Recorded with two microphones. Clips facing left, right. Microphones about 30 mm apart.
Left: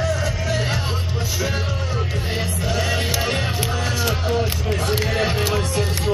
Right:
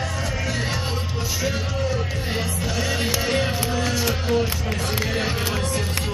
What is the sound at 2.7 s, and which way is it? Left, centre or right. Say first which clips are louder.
Music: left 2 dB; centre.